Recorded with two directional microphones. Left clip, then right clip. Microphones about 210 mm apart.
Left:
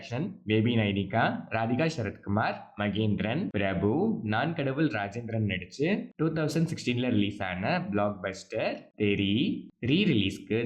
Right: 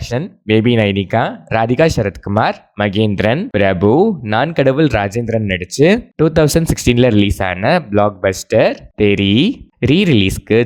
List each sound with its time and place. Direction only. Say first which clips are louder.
0.0 s speech: right 14 dB; 45° right (ahead or behind)